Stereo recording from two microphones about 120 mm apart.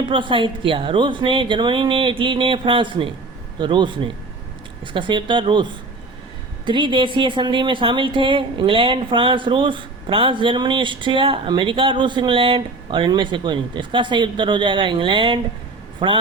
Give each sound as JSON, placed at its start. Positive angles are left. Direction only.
{"t": 0.0, "sound": "speech", "side_deg": -45}